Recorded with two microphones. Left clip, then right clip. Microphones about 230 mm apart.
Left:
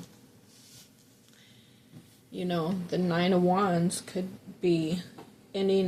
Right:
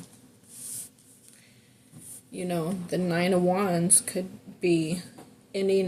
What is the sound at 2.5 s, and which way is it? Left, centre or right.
Speech, right.